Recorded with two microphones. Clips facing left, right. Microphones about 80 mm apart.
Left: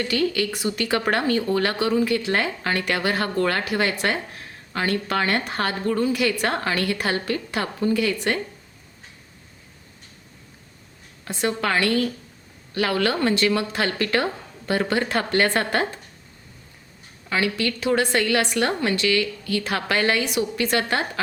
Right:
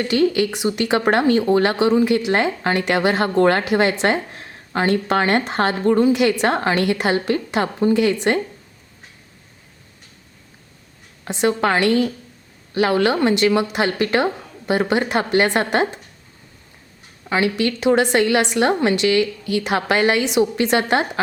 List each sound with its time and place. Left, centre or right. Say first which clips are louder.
0.0 s speech: right 5 dB; right
11.3 s speech: right 5 dB; right
17.2 s speech: right 4 dB; right